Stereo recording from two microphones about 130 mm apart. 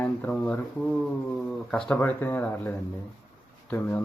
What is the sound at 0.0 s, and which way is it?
Speech, 10° left (ahead or behind).